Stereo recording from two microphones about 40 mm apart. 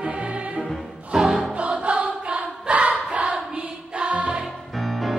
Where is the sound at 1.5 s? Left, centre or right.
Right.